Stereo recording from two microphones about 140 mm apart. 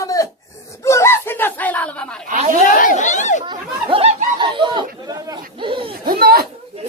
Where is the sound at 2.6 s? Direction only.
70° left (ahead or behind).